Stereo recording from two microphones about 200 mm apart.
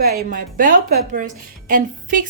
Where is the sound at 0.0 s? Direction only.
45° right (ahead or behind).